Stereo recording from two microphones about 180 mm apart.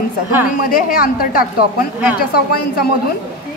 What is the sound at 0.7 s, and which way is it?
Speech, 50° left (ahead or behind).